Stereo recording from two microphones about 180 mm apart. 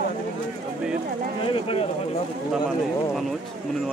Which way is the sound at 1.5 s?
30° left (ahead or behind).